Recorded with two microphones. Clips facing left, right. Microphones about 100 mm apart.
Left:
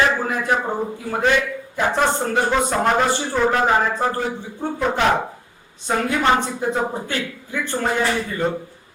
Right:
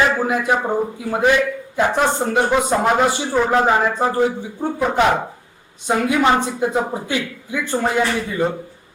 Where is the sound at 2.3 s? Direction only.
15° right (ahead or behind).